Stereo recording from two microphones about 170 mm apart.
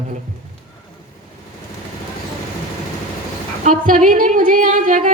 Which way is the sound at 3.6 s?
50° right (ahead or behind).